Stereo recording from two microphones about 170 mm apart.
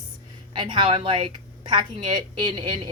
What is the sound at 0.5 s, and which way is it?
Speech, 30° right (ahead or behind).